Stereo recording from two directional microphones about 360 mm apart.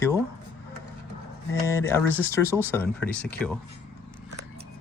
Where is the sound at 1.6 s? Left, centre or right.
Centre.